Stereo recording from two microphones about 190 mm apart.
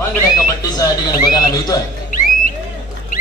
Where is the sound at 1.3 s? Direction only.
20° left (ahead or behind).